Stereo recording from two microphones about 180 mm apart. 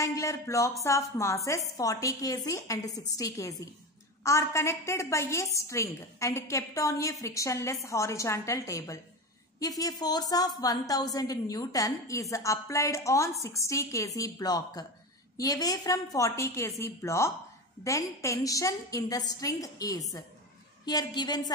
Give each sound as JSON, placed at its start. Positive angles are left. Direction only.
{"t": 0.0, "sound": "a woman's voice", "side_deg": 15}